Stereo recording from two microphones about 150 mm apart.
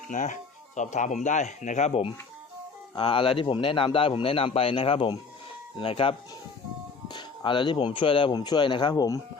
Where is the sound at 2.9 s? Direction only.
35° left (ahead or behind).